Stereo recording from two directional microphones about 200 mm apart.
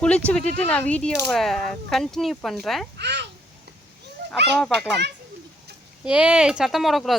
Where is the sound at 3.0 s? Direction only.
55° right (ahead or behind).